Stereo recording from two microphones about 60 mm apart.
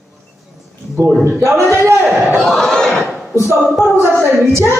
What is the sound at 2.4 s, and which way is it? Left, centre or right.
Crowd, centre.